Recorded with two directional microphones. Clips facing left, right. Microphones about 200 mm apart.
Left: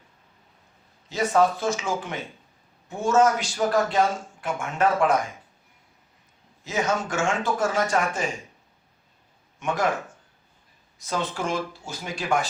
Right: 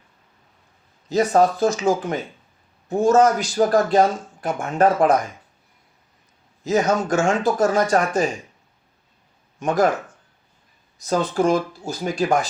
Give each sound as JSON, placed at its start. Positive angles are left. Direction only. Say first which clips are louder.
{"t": 1.1, "sound": "a man's voice", "louder": "right 4 dB", "side_deg": -40}
{"t": 6.7, "sound": "a man's voice", "louder": "right 7 dB", "side_deg": -40}
{"t": 9.6, "sound": "a man's voice", "louder": "right 6 dB", "side_deg": -35}
{"t": 11.0, "sound": "a man's voice", "louder": "right 9 dB", "side_deg": -40}